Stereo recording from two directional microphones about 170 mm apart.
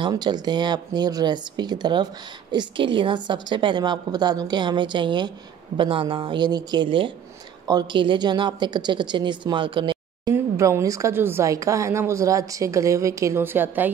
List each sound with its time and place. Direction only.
0.0 s a woman's voice: 25° right (ahead or behind)
10.3 s speech: 15° right (ahead or behind)